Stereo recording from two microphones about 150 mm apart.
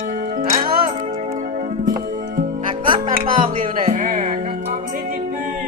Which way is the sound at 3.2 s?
70° right (ahead or behind).